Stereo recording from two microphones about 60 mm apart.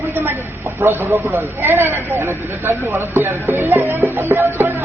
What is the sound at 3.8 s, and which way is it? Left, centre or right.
Music, right.